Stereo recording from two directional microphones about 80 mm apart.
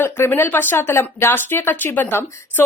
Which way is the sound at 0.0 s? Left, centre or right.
Left.